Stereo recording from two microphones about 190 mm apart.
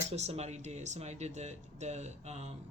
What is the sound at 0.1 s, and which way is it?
Speech, 35° right (ahead or behind).